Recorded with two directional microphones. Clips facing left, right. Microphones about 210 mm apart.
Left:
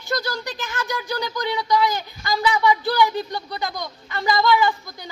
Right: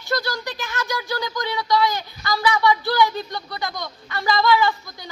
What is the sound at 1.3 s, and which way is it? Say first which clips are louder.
Speech: left 1 dB; 15° left (ahead or behind).